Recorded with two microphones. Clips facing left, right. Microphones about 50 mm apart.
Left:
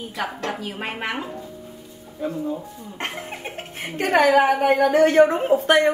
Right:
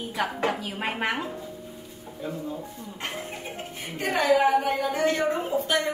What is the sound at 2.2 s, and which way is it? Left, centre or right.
Speech, centre.